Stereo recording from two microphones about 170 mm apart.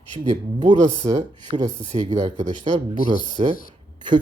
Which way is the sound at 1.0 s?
35° right (ahead or behind).